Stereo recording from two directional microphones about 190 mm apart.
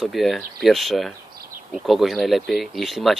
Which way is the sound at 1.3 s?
50° right (ahead or behind).